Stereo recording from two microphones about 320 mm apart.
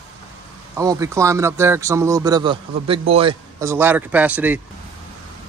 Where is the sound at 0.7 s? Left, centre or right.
Centre.